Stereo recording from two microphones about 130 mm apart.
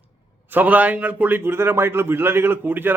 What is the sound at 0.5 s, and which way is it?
A man's voice, 10° right (ahead or behind).